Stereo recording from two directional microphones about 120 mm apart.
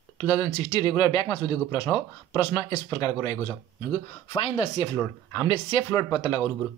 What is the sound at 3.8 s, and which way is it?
Speech, 50° left (ahead or behind).